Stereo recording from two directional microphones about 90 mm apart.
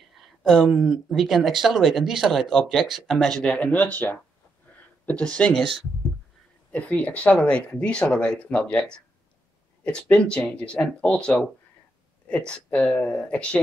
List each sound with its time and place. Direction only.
0.4 s speech: 5° left (ahead or behind)
3.5 s speech: 15° left (ahead or behind)
6.7 s speech: 15° left (ahead or behind)